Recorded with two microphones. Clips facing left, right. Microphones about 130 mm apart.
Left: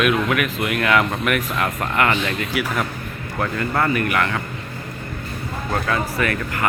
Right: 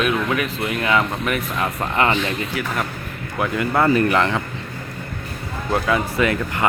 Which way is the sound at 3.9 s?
30° right (ahead or behind).